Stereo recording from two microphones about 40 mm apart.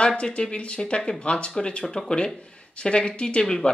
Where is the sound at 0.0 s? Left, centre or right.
Left.